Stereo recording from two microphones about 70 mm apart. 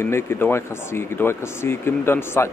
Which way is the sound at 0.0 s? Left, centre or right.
Left.